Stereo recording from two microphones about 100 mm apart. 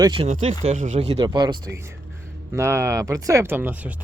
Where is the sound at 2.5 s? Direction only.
30° right (ahead or behind).